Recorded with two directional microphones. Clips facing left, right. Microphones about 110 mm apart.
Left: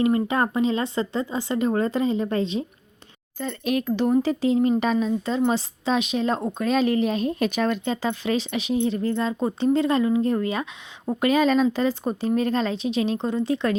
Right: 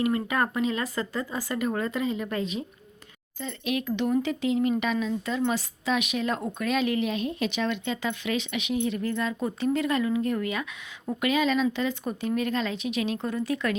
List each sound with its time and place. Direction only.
0.0 s speech: 25° left (ahead or behind)
3.4 s a woman's voice: 40° left (ahead or behind)